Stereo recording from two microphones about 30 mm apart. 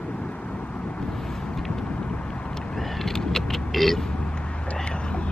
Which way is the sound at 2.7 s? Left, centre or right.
Centre.